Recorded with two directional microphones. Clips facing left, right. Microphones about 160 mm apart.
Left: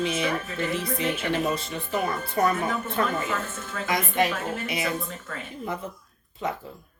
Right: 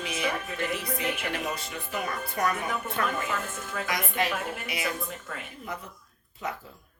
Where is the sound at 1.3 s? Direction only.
25° left (ahead or behind).